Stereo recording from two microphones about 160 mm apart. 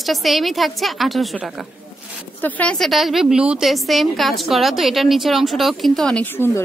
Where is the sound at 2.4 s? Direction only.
10° left (ahead or behind).